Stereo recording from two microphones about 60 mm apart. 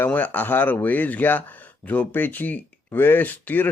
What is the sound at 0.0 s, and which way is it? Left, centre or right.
A man's voice, left.